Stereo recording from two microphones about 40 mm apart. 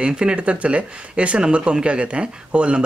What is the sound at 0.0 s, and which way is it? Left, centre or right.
Speech, right.